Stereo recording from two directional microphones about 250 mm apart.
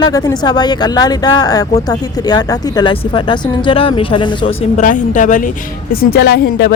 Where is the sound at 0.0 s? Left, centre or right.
Centre.